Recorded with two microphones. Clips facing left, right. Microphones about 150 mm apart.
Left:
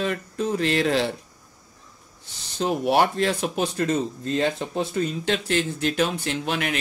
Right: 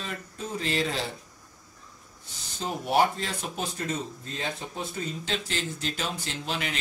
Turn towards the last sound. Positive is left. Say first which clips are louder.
# left 7 dB
turn(degrees=60)  # may be behind; listen again after turning